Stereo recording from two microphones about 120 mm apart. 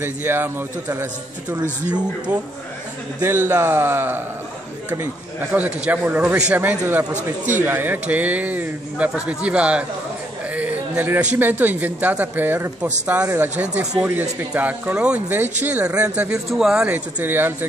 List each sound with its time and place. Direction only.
0.0 s speech: 15° right (ahead or behind)
3.2 s a man's voice: 20° right (ahead or behind)
5.5 s speech: 15° right (ahead or behind)
10.5 s a sound: 15° right (ahead or behind)
11.3 s speech: 15° right (ahead or behind)